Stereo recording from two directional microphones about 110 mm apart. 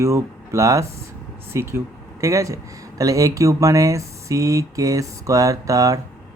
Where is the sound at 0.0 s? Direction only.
25° right (ahead or behind).